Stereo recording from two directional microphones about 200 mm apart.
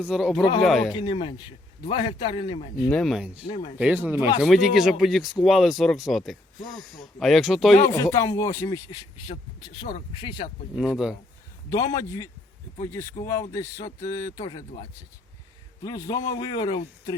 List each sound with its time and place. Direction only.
0.0 s speech: 5° right (ahead or behind)
0.9 s a man's voice: 25° left (ahead or behind)
2.9 s speech: centre (ahead or behind)
3.4 s a man's voice: 20° left (ahead or behind)
3.8 s speech: 5° right (ahead or behind)
7.9 s a man's voice: 15° left (ahead or behind)
10.8 s speech: centre (ahead or behind)
11.7 s a man's voice: 15° left (ahead or behind)